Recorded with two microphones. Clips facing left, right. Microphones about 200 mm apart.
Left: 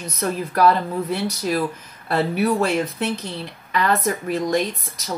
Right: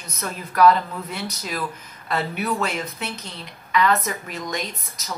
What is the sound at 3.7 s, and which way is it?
Speech, 35° left (ahead or behind).